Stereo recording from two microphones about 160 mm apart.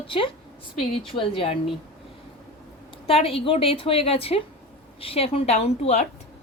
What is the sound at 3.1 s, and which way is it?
A woman's voice, 35° left (ahead or behind).